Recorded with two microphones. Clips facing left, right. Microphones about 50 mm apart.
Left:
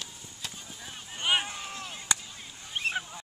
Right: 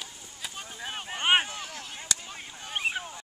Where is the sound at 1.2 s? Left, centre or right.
Right.